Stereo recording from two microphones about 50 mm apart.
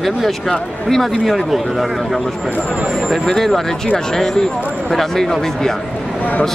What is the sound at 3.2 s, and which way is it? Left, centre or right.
A man's voice, centre.